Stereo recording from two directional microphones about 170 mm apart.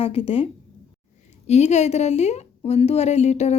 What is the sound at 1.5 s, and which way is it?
Speech, 40° left (ahead or behind).